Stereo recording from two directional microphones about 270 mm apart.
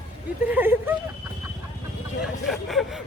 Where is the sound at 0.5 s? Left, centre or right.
Centre.